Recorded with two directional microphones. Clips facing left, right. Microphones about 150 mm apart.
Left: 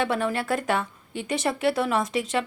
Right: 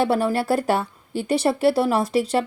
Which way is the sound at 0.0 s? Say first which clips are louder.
Right 5 dB; 35° right (ahead or behind).